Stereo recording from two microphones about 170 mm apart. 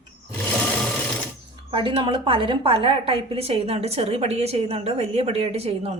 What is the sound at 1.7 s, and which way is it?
A woman's voice, 30° right (ahead or behind).